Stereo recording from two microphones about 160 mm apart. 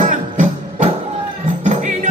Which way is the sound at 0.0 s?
55° right (ahead or behind).